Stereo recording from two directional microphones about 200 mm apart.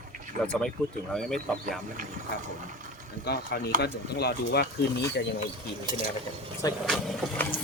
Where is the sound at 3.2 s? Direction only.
55° left (ahead or behind).